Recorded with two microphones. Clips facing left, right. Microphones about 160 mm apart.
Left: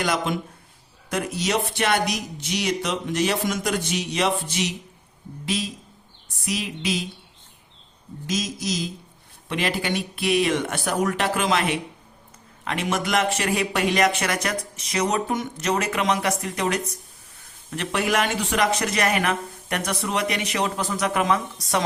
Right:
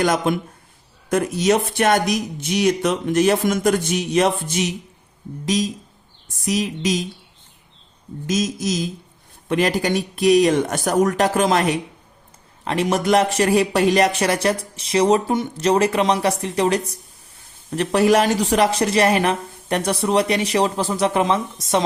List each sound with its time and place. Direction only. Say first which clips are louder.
0.0 s speech: right 5 dB; 45° right (ahead or behind)
8.3 s speech: right 6 dB; 50° right (ahead or behind); by 21.8 s 25° right (ahead or behind)